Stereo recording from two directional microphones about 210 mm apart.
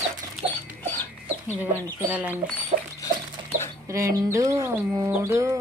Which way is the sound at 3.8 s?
15° right (ahead or behind).